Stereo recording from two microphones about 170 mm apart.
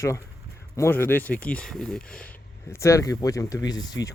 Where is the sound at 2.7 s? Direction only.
15° left (ahead or behind).